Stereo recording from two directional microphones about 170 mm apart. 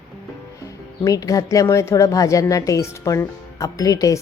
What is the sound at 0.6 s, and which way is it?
Speech, 20° left (ahead or behind).